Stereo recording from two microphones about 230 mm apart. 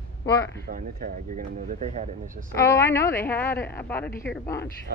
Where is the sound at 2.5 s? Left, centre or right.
Centre.